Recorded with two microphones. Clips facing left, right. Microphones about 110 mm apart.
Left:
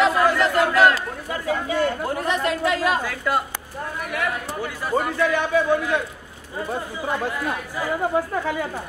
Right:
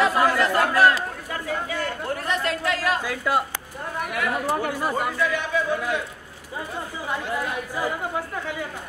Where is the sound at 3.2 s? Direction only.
10° right (ahead or behind).